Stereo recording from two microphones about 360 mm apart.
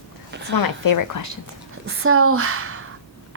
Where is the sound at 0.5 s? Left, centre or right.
Left.